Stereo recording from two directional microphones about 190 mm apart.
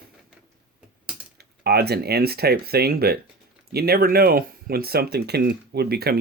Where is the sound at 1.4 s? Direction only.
55° right (ahead or behind).